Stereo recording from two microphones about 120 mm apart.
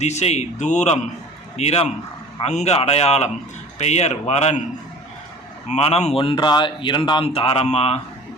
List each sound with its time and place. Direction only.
0.0 s speech: 70° left (ahead or behind)
1.5 s a man's voice: 60° left (ahead or behind)
5.6 s a man's voice: 65° left (ahead or behind); by 7.3 s 40° left (ahead or behind)
7.3 s a man's voice: 55° left (ahead or behind)